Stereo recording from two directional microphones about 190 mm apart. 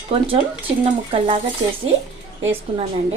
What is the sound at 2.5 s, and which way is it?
Speech, 30° right (ahead or behind).